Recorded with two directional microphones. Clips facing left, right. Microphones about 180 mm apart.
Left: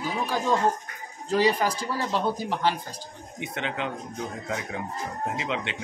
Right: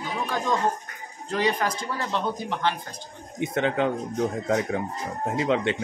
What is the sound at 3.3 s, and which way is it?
Speech, 45° right (ahead or behind).